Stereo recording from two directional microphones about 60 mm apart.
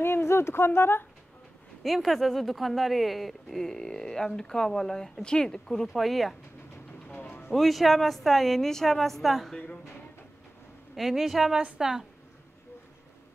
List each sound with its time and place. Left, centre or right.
0.0 s speech: left
1.8 s speech: centre
7.1 s music: left
7.5 s speech: centre
11.0 s a woman's voice: centre